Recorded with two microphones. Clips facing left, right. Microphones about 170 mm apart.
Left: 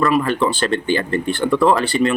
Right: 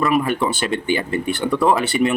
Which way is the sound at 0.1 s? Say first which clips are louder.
Left 1 dB; 15° right (ahead or behind).